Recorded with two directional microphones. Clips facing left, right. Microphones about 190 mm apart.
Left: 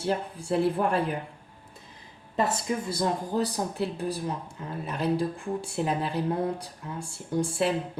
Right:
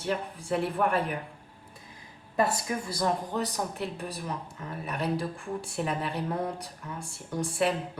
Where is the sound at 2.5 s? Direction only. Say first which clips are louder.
Left 3 dB; 25° left (ahead or behind).